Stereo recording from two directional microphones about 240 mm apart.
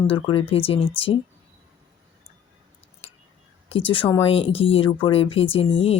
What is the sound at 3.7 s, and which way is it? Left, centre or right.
Speech, left.